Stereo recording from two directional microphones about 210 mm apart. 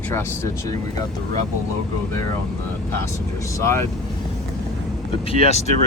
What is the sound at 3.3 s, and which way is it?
Speech, 15° left (ahead or behind).